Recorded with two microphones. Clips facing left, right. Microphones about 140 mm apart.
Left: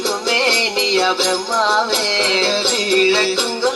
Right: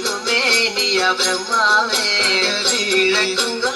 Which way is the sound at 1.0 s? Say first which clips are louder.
Left 3 dB; 25° left (ahead or behind).